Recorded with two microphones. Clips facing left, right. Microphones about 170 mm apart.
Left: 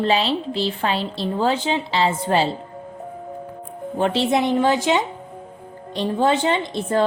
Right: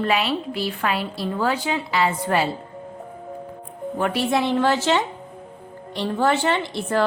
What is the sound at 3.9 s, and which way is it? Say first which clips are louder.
A woman's voice: left 3 dB; 25° left (ahead or behind).